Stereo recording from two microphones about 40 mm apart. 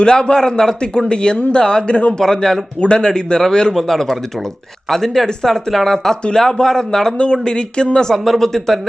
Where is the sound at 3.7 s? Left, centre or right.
Centre.